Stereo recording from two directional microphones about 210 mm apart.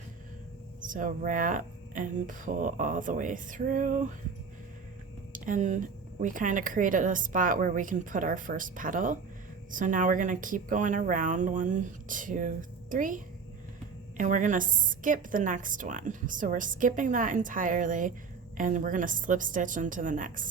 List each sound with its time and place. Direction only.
0.8 s a woman's voice: 40° right (ahead or behind)
5.3 s a woman's voice: 40° right (ahead or behind)